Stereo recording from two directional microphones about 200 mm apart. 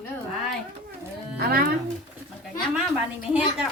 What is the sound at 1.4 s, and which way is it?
Speech, 50° right (ahead or behind).